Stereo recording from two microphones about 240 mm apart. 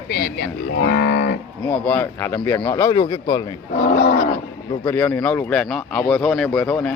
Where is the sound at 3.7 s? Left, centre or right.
Left.